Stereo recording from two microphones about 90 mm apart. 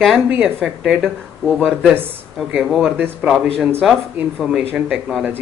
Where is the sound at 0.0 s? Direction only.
5° right (ahead or behind).